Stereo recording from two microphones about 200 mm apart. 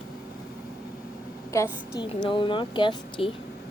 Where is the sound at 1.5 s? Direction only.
15° left (ahead or behind).